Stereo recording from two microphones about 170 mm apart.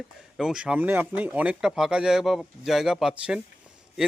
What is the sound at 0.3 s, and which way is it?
Speech, 5° right (ahead or behind).